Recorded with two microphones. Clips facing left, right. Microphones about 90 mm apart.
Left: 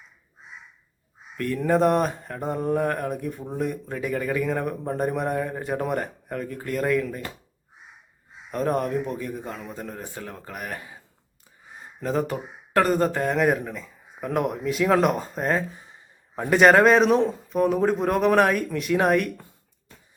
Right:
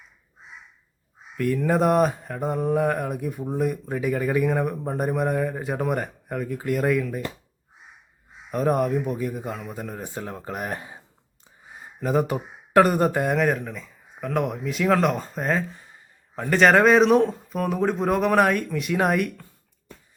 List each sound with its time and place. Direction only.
1.4 s mantra: 5° right (ahead or behind)
8.4 s speech: 5° right (ahead or behind)
10.0 s speech: 20° right (ahead or behind)
12.0 s speech: 15° right (ahead or behind)
13.3 s mantra: 5° left (ahead or behind)
16.3 s a man's voice: 10° left (ahead or behind)
16.6 s mantra: centre (ahead or behind)